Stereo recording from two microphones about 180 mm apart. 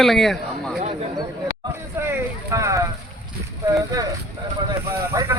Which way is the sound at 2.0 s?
15° right (ahead or behind).